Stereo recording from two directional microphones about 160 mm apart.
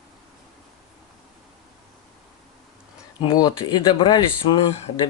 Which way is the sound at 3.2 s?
25° left (ahead or behind).